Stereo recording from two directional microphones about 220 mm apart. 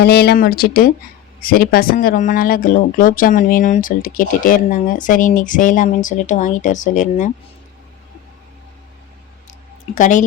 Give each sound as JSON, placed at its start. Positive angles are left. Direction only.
{"t": 0.0, "sound": "speech", "side_deg": 45}
{"t": 9.9, "sound": "speech", "side_deg": 35}